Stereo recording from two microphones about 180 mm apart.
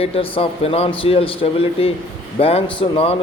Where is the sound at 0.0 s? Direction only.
30° left (ahead or behind).